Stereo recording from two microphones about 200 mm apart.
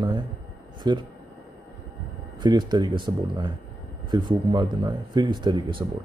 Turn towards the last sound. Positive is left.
turn(degrees=-20)  # may be behind; listen again after turning